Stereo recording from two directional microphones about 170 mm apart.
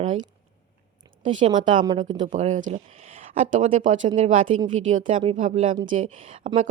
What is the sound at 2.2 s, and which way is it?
Speech, 45° right (ahead or behind).